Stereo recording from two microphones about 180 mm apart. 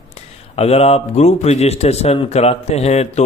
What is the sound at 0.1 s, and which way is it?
Speech, 35° left (ahead or behind).